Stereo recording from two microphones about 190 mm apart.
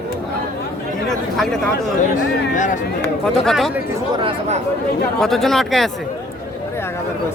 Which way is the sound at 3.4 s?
Centre (ahead or behind).